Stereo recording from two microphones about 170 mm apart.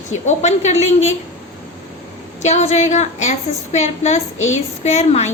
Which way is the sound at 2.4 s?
40° left (ahead or behind).